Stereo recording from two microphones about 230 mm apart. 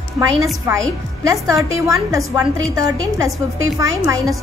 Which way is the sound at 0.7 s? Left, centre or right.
Centre.